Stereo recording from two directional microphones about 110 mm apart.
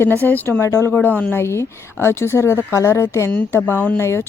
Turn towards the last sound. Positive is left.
turn(degrees=20)  # may be behind; listen again after turning